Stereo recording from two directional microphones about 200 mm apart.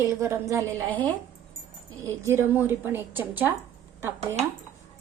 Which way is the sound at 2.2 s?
10° right (ahead or behind).